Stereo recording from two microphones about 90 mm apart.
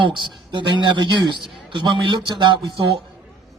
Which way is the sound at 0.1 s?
60° right (ahead or behind).